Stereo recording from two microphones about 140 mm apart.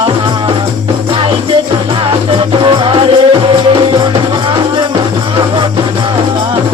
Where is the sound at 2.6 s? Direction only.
40° right (ahead or behind).